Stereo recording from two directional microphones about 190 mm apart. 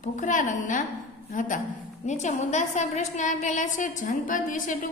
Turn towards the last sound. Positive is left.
turn(degrees=45)  # may be behind; listen again after turning